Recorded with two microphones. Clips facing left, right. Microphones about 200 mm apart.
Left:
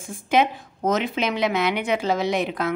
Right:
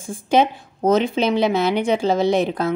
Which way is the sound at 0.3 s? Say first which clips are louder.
Right 3 dB; 30° right (ahead or behind).